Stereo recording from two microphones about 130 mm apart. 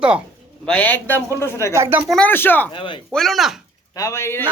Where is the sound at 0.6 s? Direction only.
10° left (ahead or behind).